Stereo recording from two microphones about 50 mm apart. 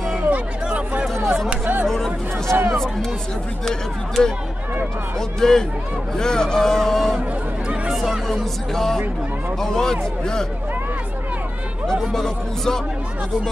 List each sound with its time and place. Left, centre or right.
0.3 s a sound: right
1.1 s a sound: right
1.9 s music: centre
2.5 s speech: right
3.6 s a man's voice: centre
5.4 s a man's voice: centre
8.7 s a man's voice: centre
11.9 s a man's voice: centre